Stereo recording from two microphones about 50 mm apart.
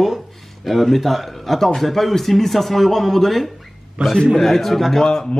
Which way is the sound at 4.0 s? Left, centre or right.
Right.